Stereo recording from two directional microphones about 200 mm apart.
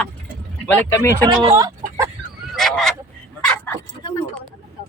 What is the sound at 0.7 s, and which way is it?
Speech, 10° left (ahead or behind).